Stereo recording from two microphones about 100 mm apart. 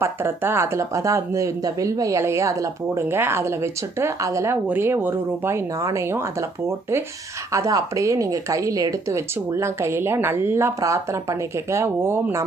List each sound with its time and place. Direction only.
0.0 s speech: 25° right (ahead or behind)
4.7 s speech: 20° right (ahead or behind)